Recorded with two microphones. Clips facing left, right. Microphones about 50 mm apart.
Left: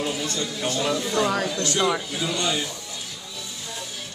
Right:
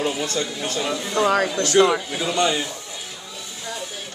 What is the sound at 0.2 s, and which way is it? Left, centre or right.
Speech, right.